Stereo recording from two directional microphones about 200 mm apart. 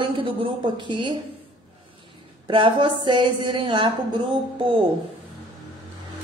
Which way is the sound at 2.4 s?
25° right (ahead or behind).